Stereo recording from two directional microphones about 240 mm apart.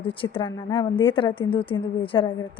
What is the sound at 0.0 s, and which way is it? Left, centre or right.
A woman's voice, left.